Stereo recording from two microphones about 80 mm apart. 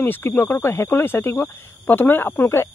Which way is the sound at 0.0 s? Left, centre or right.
Left.